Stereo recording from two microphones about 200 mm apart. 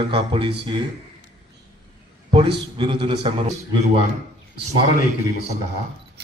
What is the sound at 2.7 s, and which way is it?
Speech, 25° right (ahead or behind).